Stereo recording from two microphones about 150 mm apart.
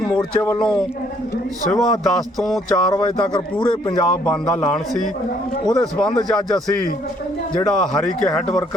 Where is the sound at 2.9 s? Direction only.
30° left (ahead or behind).